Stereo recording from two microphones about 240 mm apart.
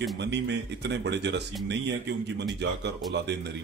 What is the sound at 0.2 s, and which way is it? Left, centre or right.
Speech, right.